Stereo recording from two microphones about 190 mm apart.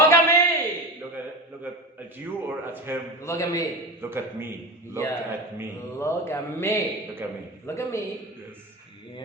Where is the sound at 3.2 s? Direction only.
15° left (ahead or behind).